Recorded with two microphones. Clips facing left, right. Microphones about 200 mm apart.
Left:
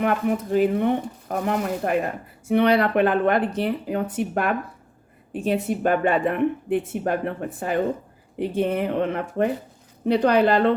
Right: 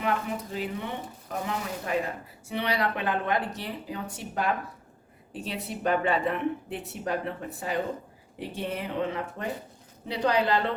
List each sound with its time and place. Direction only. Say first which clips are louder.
0.0 s speech: left 7 dB; 55° left (ahead or behind)